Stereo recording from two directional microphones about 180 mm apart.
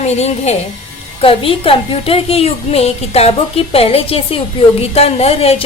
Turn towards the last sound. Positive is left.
turn(degrees=35)  # may be behind; listen again after turning